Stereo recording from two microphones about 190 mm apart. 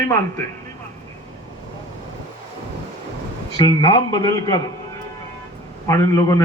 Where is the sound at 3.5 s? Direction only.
25° left (ahead or behind).